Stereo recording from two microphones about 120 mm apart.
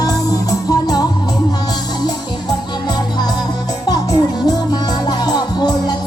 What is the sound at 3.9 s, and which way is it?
Music, 35° left (ahead or behind).